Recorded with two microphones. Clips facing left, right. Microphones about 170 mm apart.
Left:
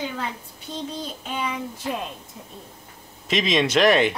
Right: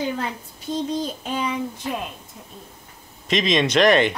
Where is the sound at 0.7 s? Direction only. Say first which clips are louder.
Right 8 dB; 40° right (ahead or behind).